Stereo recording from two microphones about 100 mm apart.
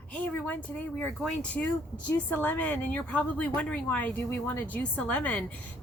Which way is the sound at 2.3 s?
15° left (ahead or behind).